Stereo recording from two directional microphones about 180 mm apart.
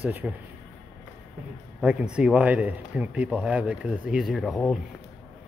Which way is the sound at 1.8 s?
5° right (ahead or behind).